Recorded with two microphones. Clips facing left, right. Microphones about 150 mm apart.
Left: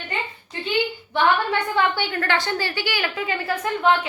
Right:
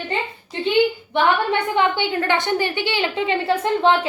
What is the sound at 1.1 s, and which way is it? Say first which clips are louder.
A woman's voice: left 1 dB; 20° right (ahead or behind).